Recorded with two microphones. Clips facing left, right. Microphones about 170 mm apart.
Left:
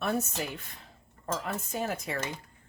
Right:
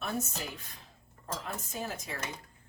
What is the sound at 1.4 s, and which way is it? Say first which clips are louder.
Speech: left 4 dB; 65° left (ahead or behind).